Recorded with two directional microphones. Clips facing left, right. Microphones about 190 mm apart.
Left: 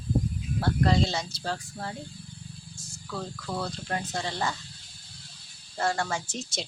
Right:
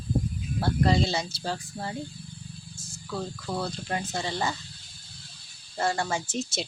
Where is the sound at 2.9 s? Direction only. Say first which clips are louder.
Right 2 dB; 10° right (ahead or behind).